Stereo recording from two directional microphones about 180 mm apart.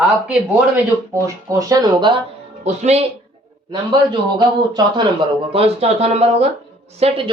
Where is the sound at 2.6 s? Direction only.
35° right (ahead or behind).